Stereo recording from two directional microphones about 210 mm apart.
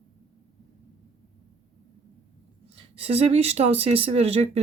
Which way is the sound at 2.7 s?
25° right (ahead or behind).